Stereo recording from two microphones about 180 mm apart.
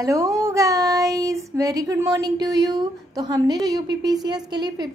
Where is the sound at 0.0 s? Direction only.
15° right (ahead or behind).